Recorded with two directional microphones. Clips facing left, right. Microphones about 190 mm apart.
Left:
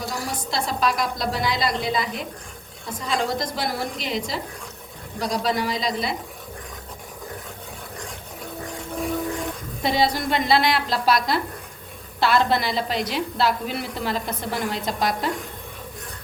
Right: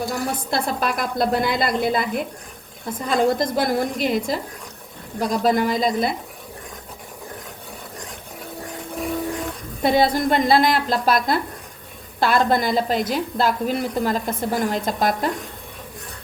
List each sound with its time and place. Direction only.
0.1 s a woman's voice: 55° right (ahead or behind)
9.8 s a woman's voice: 50° right (ahead or behind)